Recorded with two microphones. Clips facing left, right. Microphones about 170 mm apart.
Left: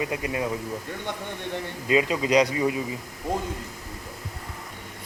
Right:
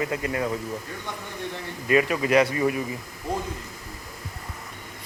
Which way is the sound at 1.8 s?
20° left (ahead or behind).